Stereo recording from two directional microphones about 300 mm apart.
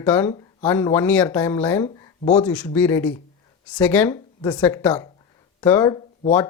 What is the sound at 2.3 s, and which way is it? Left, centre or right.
Speech, centre.